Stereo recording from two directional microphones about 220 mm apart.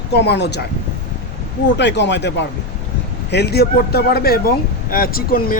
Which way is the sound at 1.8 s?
55° left (ahead or behind).